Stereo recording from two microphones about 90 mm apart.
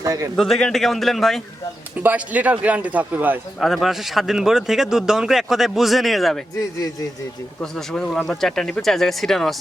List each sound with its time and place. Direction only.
0.0 s a man's voice: 40° right (ahead or behind)
0.3 s a man's voice: centre (ahead or behind)
2.0 s speech: 20° right (ahead or behind)
3.6 s a man's voice: centre (ahead or behind)
7.6 s a man's voice: 5° left (ahead or behind)